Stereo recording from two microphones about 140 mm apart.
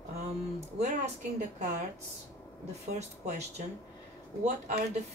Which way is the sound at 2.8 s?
55° right (ahead or behind).